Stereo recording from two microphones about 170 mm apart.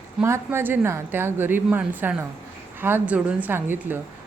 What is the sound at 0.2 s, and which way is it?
Speech, 15° right (ahead or behind).